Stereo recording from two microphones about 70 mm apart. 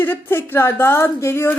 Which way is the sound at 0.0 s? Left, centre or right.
Left.